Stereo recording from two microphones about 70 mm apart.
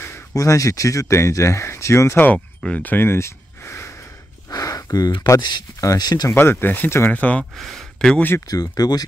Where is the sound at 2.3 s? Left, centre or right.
Centre; by 4.0 s left.